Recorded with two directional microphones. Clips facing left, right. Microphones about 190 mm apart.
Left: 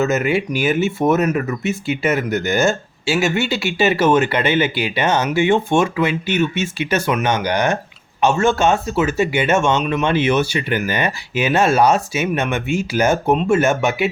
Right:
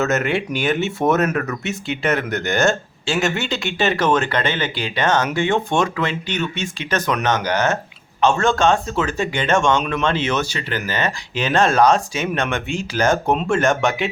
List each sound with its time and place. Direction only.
0.0 s speech: centre (ahead or behind)